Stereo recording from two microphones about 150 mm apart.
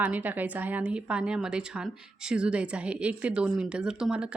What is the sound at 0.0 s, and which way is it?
A woman's voice, 10° right (ahead or behind).